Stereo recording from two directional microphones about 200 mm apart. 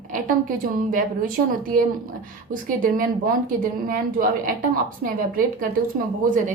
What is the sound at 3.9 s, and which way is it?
A woman's voice, 45° right (ahead or behind).